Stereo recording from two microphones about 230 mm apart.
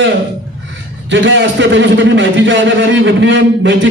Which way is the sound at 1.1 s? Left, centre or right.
Right.